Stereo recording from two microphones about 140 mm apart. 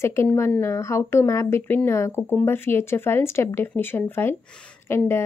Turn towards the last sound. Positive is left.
turn(degrees=15)  # may be behind; listen again after turning